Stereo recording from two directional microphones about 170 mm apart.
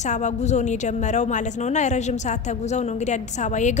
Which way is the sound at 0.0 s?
45° left (ahead or behind).